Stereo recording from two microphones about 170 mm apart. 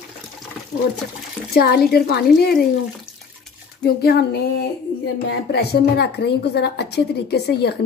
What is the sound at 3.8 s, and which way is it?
A woman's voice, 70° left (ahead or behind).